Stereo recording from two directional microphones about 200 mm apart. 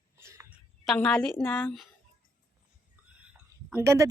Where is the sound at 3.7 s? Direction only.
15° right (ahead or behind).